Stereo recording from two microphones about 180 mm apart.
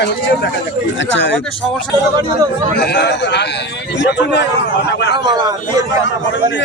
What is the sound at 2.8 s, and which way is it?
A man's voice, 70° left (ahead or behind).